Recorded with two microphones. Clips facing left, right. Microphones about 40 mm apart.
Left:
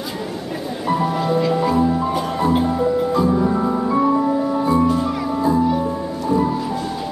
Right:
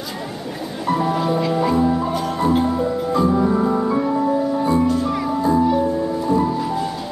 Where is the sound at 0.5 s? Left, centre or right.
Centre.